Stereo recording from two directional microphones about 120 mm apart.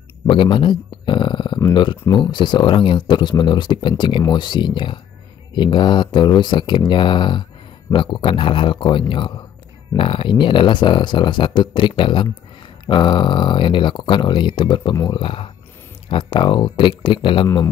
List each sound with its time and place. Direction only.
0.3 s speech: 45° left (ahead or behind)